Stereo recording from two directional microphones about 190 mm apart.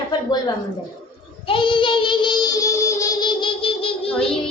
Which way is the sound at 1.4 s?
25° left (ahead or behind).